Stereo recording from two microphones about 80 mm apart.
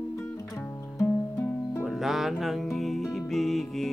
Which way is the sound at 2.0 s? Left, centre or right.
Centre.